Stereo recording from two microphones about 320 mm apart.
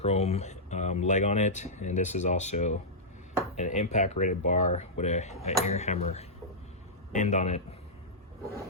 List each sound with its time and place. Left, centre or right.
0.0 s speech: centre